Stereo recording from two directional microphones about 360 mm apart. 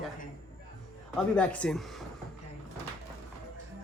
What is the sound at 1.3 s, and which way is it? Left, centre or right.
Speech, centre.